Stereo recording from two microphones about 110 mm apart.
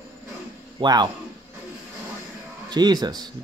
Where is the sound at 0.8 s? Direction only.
40° right (ahead or behind).